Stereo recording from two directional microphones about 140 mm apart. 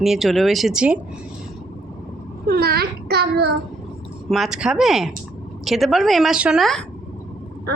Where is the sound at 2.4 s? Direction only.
90° right.